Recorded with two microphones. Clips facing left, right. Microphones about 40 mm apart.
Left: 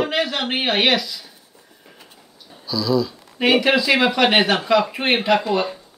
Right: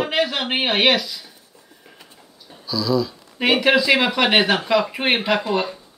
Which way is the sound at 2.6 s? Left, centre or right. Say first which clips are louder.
Left 1 dB; centre.